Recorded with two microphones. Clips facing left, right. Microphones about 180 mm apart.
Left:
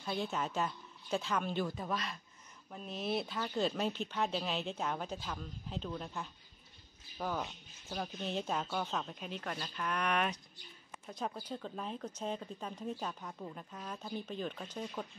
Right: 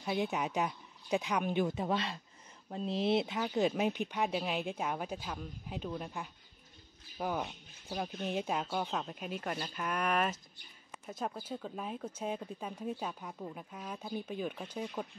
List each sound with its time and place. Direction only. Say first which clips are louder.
0.0 s speech: right 3 dB; 15° right (ahead or behind)